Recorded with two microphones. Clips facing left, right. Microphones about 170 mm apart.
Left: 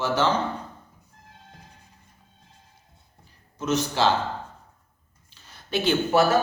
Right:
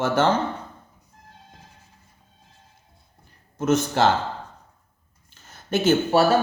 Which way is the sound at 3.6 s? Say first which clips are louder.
Right 3 dB; 50° right (ahead or behind).